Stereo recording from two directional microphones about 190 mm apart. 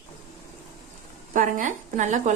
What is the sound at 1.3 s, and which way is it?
Speech, 40° right (ahead or behind).